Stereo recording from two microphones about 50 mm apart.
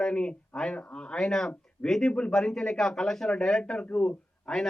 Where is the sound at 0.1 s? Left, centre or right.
Left.